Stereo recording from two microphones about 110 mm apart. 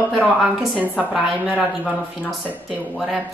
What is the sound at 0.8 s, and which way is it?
Speech, 15° right (ahead or behind).